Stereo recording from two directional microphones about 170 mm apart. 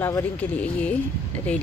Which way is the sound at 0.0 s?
10° left (ahead or behind).